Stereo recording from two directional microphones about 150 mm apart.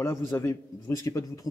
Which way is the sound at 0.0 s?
15° left (ahead or behind).